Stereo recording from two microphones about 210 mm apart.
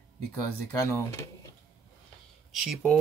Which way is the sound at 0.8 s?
15° left (ahead or behind).